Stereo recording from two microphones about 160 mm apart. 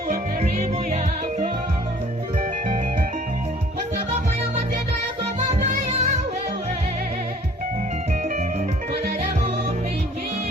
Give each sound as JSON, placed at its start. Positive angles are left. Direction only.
{"t": 0.5, "sound": "music", "side_deg": -45}
{"t": 5.4, "sound": "music", "side_deg": -50}